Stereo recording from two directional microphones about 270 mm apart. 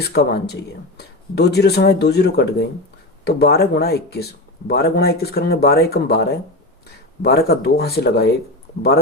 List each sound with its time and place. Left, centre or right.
0.0 s speech: left